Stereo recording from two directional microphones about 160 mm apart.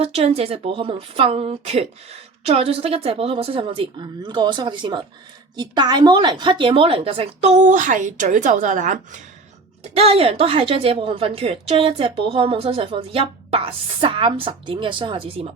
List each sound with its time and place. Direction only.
0.0 s a woman's voice: 40° right (ahead or behind)
9.9 s a woman's voice: 40° right (ahead or behind)